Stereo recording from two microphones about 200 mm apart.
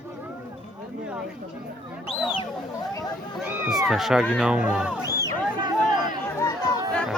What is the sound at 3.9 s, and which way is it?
Speech, centre (ahead or behind).